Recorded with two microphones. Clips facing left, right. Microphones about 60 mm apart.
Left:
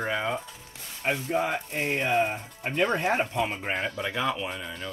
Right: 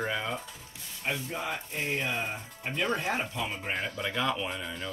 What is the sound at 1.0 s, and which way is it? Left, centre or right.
Speech, left.